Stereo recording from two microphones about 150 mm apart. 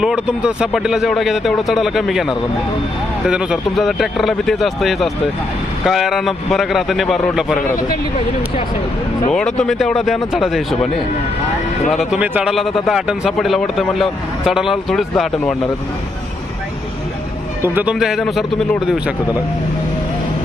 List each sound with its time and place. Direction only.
0.0 s speech: 5° right (ahead or behind)
9.3 s speech: 5° left (ahead or behind)
11.9 s speech: centre (ahead or behind)
17.6 s speech: 15° right (ahead or behind)
18.0 s speech: centre (ahead or behind)